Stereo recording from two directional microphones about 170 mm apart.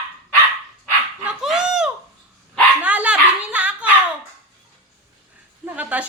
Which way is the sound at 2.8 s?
10° right (ahead or behind).